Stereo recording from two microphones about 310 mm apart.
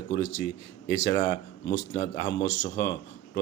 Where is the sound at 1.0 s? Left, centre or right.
Left.